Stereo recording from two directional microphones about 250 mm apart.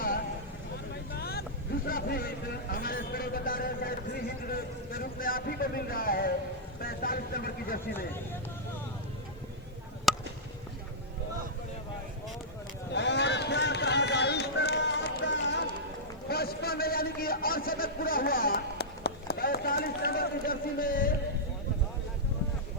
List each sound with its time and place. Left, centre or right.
1.1 s vehicle: left
1.9 s speech: left
10.1 s chop: centre
12.9 s run: left
16.3 s a sound: left